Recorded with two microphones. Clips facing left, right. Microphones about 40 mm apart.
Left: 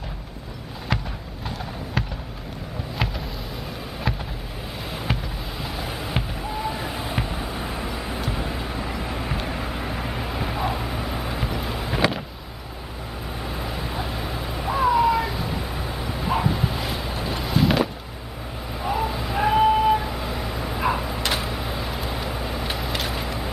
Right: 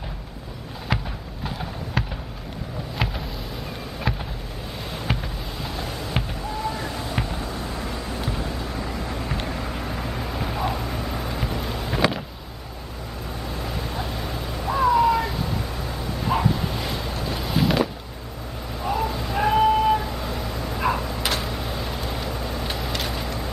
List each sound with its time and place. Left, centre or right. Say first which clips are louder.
2.0 s a sound: right 1 dB; centre
4.1 s vehicle: even; centre
4.9 s music: even; centre
6.4 s a sound: even; centre
7.2 s vehicle: even; centre
13.5 s vehicle: even; centre
18.8 s vehicle: even; centre